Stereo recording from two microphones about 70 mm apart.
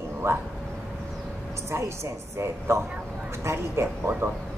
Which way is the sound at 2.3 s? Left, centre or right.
Right.